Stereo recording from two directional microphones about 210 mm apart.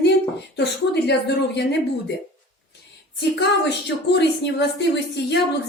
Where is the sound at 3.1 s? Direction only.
55° left (ahead or behind).